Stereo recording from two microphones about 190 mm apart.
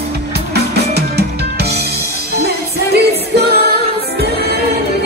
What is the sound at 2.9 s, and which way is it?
Music, 60° right (ahead or behind).